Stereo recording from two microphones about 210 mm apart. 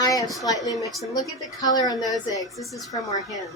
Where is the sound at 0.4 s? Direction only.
15° left (ahead or behind).